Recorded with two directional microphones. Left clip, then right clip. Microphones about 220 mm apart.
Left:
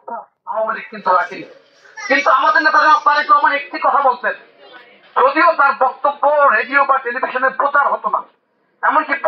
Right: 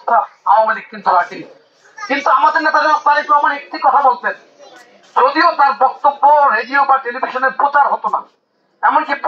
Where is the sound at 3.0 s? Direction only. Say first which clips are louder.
Even; centre (ahead or behind).